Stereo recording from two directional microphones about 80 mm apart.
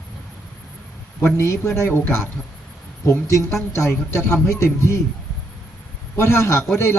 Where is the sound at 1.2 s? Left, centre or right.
Left.